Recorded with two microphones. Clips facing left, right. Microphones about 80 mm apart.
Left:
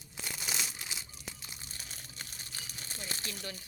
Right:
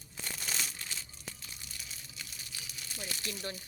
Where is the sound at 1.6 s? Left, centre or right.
Left.